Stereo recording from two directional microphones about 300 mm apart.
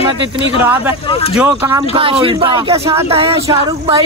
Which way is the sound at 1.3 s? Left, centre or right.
Centre.